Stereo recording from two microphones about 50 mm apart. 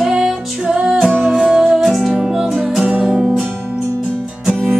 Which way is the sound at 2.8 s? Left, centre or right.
Right.